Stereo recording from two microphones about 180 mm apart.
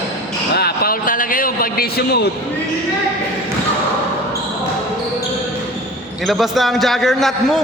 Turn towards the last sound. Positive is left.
turn(degrees=0)  # may be behind; listen again after turning